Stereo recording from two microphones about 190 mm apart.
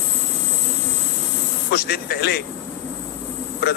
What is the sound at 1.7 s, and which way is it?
Speech, 55° left (ahead or behind).